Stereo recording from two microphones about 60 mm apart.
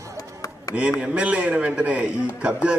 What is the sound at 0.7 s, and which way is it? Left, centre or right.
A man's voice, right.